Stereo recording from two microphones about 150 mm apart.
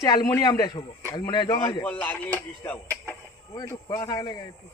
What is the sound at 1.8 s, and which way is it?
Speech, 10° left (ahead or behind).